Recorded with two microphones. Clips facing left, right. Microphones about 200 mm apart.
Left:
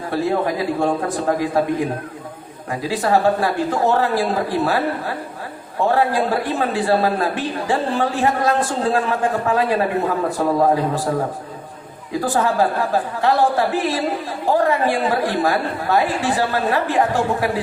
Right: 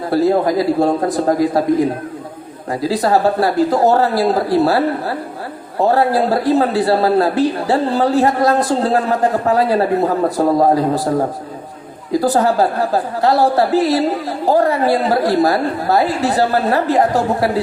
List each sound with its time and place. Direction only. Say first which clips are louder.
0.1 s a woman's voice: right 6 dB; 40° right (ahead or behind)
2.8 s a woman's voice: right 3 dB; 40° right (ahead or behind)
12.2 s a woman's voice: right 3 dB; 35° right (ahead or behind)